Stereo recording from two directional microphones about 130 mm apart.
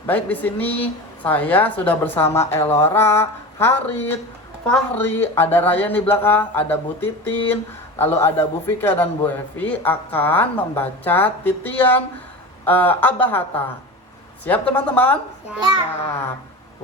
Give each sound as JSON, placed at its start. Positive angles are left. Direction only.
{"t": 0.0, "sound": "a man's voice", "side_deg": 15}